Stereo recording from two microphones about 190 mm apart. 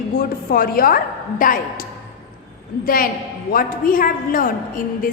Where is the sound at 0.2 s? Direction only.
50° left (ahead or behind).